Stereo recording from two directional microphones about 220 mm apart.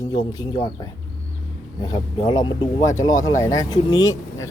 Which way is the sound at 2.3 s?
20° left (ahead or behind).